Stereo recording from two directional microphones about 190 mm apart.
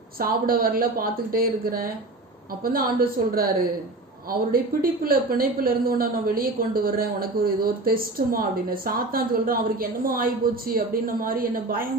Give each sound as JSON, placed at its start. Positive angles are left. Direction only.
{"t": 0.2, "sound": "speech", "side_deg": -50}